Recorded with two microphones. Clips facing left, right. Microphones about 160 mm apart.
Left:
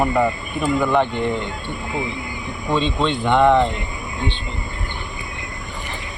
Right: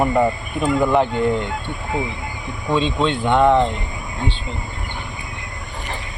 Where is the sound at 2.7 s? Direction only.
Centre (ahead or behind).